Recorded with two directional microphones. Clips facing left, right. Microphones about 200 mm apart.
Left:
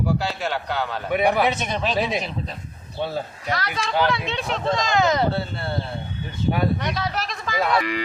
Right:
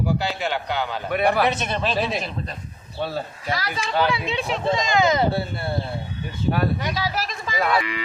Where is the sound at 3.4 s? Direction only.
5° right (ahead or behind).